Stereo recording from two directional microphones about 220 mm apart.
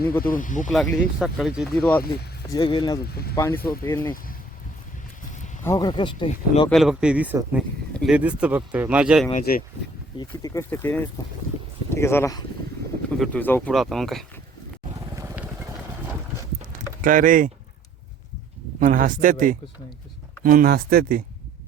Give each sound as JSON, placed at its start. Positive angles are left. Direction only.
{"t": 0.2, "sound": "speech", "side_deg": 40}
{"t": 0.7, "sound": "speech", "side_deg": 0}
{"t": 2.5, "sound": "speech", "side_deg": 20}
{"t": 5.6, "sound": "speech", "side_deg": 15}
{"t": 6.7, "sound": "speech", "side_deg": 0}
{"t": 9.4, "sound": "speech", "side_deg": 40}
{"t": 10.2, "sound": "speech", "side_deg": 15}
{"t": 14.9, "sound": "vehicle", "side_deg": -10}
{"t": 17.0, "sound": "speech", "side_deg": -40}
{"t": 18.8, "sound": "speech", "side_deg": -40}